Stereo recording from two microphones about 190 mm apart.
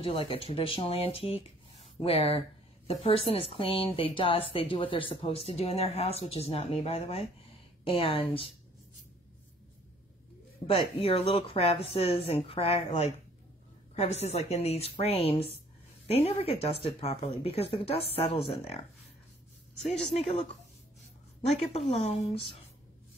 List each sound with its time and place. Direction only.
0.0 s a woman's voice: 30° left (ahead or behind)
10.7 s a woman's voice: 30° left (ahead or behind)
21.5 s a woman's voice: 35° left (ahead or behind)